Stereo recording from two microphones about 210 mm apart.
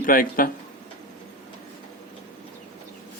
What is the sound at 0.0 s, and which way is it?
Speech, 40° left (ahead or behind).